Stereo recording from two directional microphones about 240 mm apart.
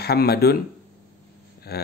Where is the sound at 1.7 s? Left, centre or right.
Left.